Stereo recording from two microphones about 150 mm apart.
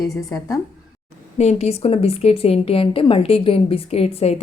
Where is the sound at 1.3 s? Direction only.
45° left (ahead or behind).